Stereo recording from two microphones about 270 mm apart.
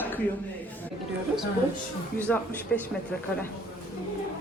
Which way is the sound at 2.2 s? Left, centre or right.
Centre.